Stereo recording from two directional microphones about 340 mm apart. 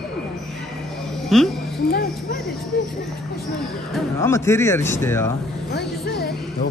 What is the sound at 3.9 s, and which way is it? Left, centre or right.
A man's voice, centre.